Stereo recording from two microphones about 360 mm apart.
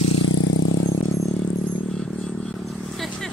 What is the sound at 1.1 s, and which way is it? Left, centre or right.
Vehicle, centre.